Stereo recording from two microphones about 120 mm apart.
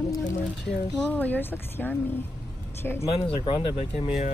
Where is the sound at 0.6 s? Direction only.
10° left (ahead or behind).